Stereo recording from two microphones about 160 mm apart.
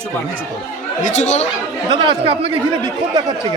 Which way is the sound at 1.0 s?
50° left (ahead or behind).